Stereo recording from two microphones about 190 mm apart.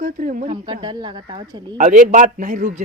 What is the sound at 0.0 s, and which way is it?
Speech, 45° right (ahead or behind).